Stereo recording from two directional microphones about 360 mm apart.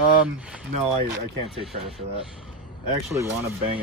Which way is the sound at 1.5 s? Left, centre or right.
Centre.